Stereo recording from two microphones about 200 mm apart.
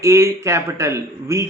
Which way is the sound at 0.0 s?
15° right (ahead or behind).